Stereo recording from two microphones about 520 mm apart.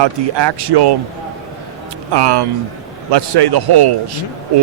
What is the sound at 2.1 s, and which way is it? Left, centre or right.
Speech, right.